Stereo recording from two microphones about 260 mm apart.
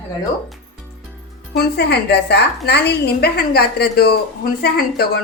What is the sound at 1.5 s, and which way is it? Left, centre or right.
A woman's voice, left.